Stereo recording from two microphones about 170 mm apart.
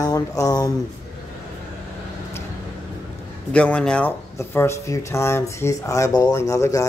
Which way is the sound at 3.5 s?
5° left (ahead or behind).